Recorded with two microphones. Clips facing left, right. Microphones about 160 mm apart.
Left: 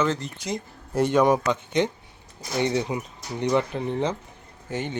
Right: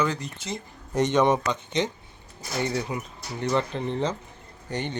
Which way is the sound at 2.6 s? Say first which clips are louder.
Left 4 dB; 20° left (ahead or behind).